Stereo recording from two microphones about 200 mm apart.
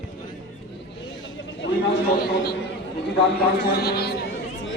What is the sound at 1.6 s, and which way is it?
Chatter, 70° left (ahead or behind).